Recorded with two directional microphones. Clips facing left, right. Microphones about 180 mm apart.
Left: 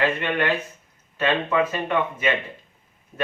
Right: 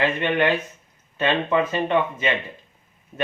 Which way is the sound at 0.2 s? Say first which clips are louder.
Right 3 dB; 20° right (ahead or behind).